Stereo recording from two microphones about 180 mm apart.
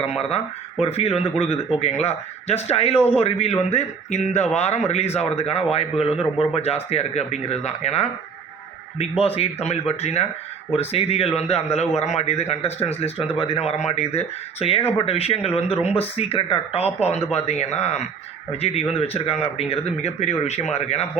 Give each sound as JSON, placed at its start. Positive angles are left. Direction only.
{"t": 0.2, "sound": "a man's voice", "side_deg": 35}
{"t": 6.1, "sound": "a man's voice", "side_deg": -5}
{"t": 6.5, "sound": "a man's voice", "side_deg": 35}